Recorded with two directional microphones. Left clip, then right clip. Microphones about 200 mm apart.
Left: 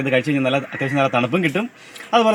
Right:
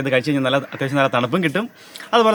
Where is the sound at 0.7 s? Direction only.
15° right (ahead or behind).